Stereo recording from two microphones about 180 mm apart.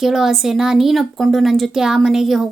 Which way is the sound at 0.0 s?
Centre (ahead or behind).